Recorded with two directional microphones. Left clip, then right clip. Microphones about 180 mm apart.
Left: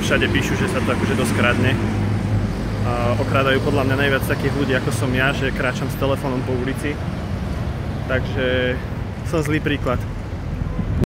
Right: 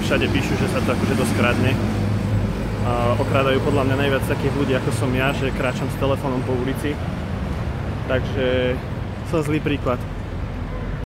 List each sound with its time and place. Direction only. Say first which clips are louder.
0.0 s speech: left 2 dB; centre (ahead or behind)
0.9 s speech: left 1 dB; 55° right (ahead or behind)
2.9 s speech: even; 10° right (ahead or behind)
8.1 s speech: even; 10° right (ahead or behind)